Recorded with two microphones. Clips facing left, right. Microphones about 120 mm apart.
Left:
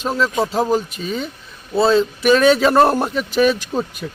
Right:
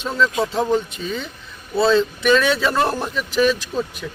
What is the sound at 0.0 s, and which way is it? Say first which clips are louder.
A man's voice: left 1 dB; 35° left (ahead or behind).